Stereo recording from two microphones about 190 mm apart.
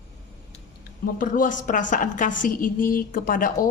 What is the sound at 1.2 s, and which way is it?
A woman's voice, 45° left (ahead or behind).